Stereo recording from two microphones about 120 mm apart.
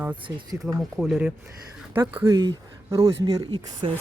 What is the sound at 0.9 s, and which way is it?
Speech, centre (ahead or behind).